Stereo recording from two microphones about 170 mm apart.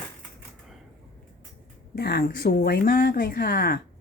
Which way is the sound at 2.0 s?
65° left (ahead or behind).